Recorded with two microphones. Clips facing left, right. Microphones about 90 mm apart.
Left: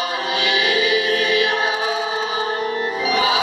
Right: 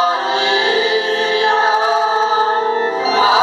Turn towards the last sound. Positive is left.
turn(degrees=-30)  # may be behind; listen again after turning